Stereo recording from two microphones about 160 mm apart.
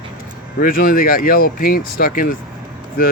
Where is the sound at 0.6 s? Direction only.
65° left (ahead or behind).